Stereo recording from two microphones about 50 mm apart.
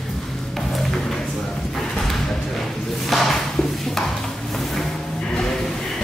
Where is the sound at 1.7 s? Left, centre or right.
Centre.